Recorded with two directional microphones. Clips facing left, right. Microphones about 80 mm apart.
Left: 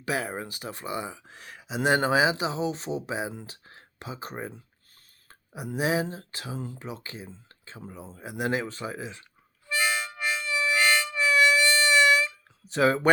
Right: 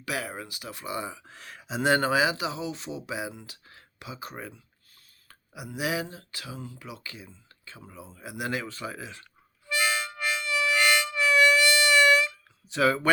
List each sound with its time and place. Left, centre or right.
0.0 s speech: left; by 2.0 s centre
2.0 s speech: left
9.7 s harmonica: left
12.7 s speech: left